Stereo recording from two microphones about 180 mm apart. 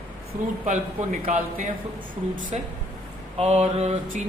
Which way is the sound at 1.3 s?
45° right (ahead or behind).